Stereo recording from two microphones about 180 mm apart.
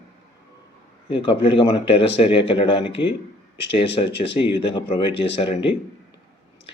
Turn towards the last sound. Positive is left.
turn(degrees=30)  # may be behind; listen again after turning